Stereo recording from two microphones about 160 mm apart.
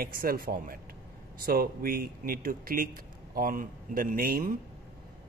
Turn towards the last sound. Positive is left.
turn(degrees=-60)  # may be behind; listen again after turning